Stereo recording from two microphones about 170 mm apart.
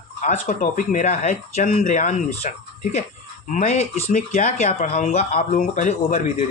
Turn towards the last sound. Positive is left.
turn(degrees=40)  # may be behind; listen again after turning